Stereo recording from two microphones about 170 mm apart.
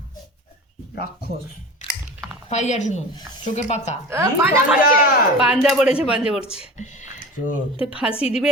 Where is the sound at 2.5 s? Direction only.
45° left (ahead or behind).